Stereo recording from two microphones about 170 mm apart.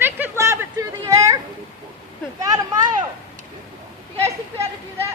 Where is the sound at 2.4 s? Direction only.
20° right (ahead or behind).